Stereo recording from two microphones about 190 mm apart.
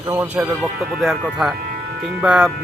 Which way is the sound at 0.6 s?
Centre (ahead or behind).